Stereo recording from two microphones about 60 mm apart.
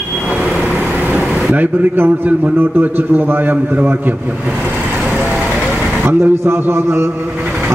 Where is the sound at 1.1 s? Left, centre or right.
Right.